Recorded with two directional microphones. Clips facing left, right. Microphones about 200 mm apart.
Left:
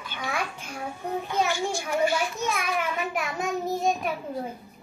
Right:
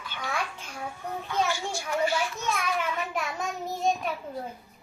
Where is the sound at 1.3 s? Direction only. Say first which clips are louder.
Left 1 dB; 15° left (ahead or behind).